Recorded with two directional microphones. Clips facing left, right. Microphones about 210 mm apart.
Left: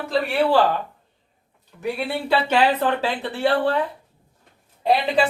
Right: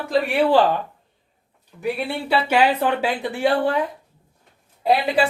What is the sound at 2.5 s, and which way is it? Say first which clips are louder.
Speech: right 2 dB; 10° right (ahead or behind).